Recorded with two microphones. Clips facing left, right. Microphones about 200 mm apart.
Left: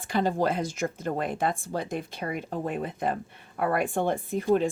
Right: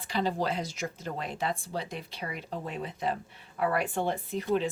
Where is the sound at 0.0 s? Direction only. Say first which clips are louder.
Left 4 dB; 50° left (ahead or behind).